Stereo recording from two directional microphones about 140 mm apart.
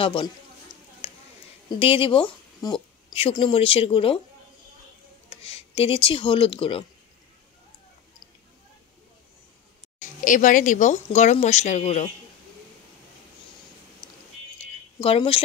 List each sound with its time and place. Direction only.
0.0 s a sound: 35° left (ahead or behind)
1.7 s a woman's voice: 40° left (ahead or behind)
5.3 s speech: 45° left (ahead or behind)
9.9 s speech: 65° left (ahead or behind)
14.0 s music: 30° left (ahead or behind)
15.0 s speech: 40° left (ahead or behind)